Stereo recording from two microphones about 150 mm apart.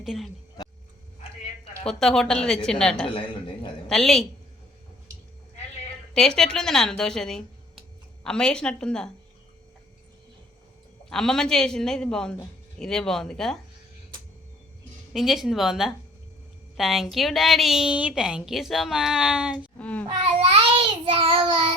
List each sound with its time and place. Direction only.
0.0 s speech: centre (ahead or behind)
1.9 s a woman's voice: 5° left (ahead or behind)
6.1 s a woman's voice: 5° left (ahead or behind)
11.1 s a woman's voice: 5° left (ahead or behind)
15.1 s a woman's voice: centre (ahead or behind)
19.8 s child singing: 10° left (ahead or behind)
20.4 s child singing: 40° right (ahead or behind)